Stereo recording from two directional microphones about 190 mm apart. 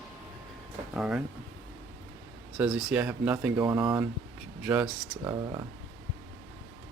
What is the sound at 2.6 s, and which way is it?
Speech, 5° right (ahead or behind).